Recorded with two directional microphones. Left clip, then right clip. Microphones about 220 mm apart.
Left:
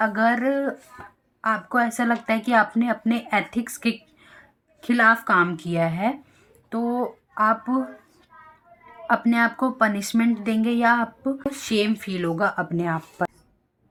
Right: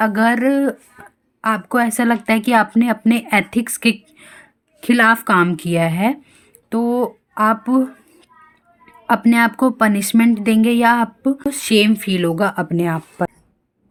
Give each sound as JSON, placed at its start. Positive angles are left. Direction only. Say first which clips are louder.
{"t": 0.0, "sound": "speech", "louder": "right 5 dB", "side_deg": -45}
{"t": 9.0, "sound": "speech", "louder": "right 6 dB", "side_deg": -45}